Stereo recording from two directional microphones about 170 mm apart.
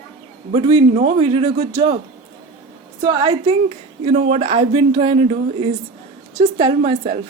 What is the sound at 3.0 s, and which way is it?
Speech, 25° right (ahead or behind).